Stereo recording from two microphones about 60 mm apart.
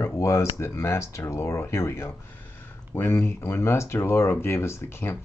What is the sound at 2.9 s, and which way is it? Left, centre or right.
Speech, left.